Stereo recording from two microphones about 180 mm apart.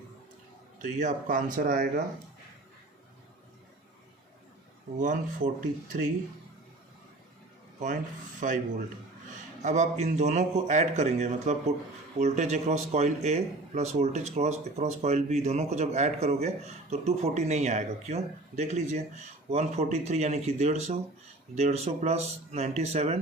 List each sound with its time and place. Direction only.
0.8 s speech: 45° right (ahead or behind)
4.9 s speech: 45° right (ahead or behind)
8.4 s speech: 45° right (ahead or behind)
9.6 s speech: 40° right (ahead or behind)